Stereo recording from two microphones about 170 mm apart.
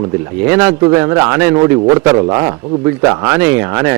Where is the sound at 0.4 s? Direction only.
10° right (ahead or behind).